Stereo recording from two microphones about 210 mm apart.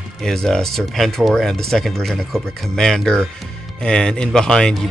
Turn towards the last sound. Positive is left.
turn(degrees=5)  # may be behind; listen again after turning